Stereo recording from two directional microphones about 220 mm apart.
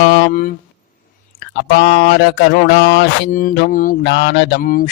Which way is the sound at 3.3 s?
40° left (ahead or behind).